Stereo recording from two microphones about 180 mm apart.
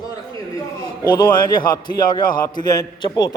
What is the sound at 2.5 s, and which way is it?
Speech, 20° left (ahead or behind).